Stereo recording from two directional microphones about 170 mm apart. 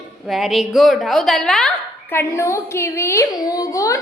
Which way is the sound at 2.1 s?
15° left (ahead or behind).